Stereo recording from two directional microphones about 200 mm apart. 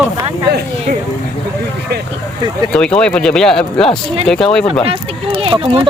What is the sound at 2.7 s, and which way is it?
Speech, 5° left (ahead or behind).